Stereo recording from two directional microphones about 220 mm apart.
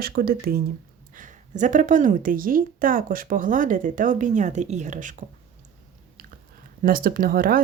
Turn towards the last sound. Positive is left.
turn(degrees=-40)  # may be behind; listen again after turning